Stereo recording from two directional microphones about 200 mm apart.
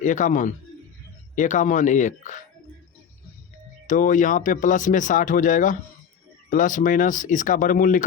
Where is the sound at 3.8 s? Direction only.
40° left (ahead or behind).